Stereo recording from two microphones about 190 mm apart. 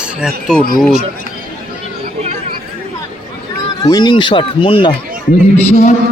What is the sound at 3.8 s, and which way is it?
Speech, 20° left (ahead or behind).